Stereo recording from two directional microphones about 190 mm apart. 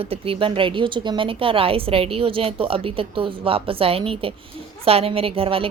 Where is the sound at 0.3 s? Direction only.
30° right (ahead or behind).